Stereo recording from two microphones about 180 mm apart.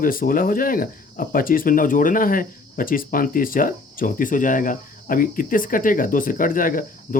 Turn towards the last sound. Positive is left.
turn(degrees=50)  # may be behind; listen again after turning